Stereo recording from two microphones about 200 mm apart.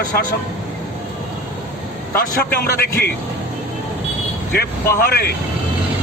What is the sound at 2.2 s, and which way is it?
Speech, 50° left (ahead or behind).